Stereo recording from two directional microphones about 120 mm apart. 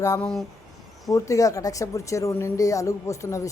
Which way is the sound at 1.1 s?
25° left (ahead or behind).